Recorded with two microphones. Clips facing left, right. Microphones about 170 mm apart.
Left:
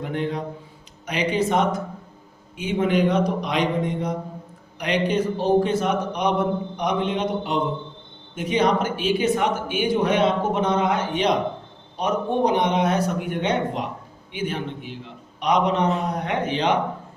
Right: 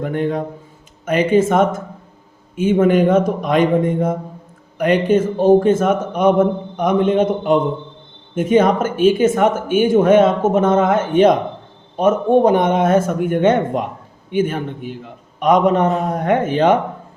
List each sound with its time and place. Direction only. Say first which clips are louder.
0.0 s speech: right 6 dB; 50° right (ahead or behind)